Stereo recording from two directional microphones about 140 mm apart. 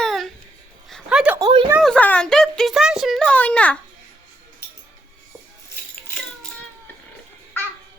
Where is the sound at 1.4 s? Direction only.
35° right (ahead or behind).